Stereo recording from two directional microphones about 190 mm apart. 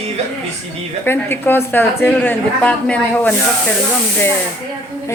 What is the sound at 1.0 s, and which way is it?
A woman's voice, 10° left (ahead or behind).